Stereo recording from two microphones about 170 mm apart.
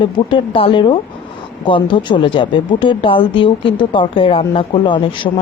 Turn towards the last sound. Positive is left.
turn(degrees=30)  # may be behind; listen again after turning